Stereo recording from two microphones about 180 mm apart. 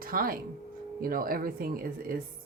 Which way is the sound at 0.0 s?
55° right (ahead or behind).